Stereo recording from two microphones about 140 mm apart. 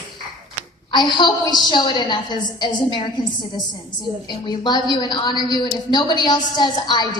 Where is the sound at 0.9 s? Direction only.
30° left (ahead or behind).